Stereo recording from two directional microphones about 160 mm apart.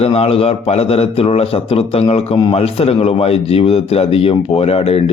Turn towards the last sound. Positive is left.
turn(degrees=40)  # may be behind; listen again after turning